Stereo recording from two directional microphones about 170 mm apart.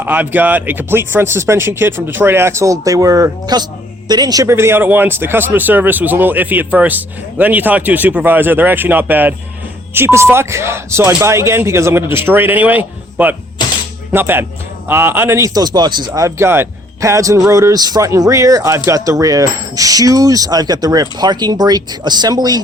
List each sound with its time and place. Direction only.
0.0 s a man's voice: 10° right (ahead or behind)